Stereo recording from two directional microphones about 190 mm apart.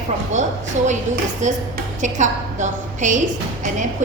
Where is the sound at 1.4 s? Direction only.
40° right (ahead or behind).